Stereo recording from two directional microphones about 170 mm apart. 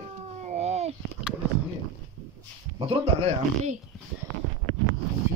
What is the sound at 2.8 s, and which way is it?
Speech, 35° right (ahead or behind).